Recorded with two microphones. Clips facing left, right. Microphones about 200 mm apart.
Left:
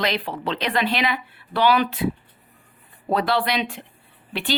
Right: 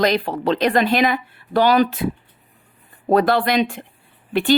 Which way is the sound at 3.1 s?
45° right (ahead or behind).